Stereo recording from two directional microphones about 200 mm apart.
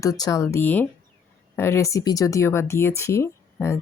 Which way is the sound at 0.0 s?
15° left (ahead or behind).